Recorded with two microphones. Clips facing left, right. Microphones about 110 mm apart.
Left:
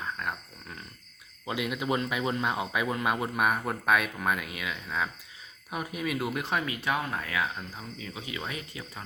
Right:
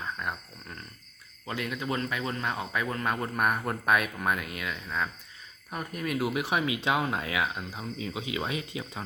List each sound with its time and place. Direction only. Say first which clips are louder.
0.2 s speech: even; centre (ahead or behind)
1.5 s speech: left 2 dB; 10° left (ahead or behind); by 9.0 s 20° right (ahead or behind)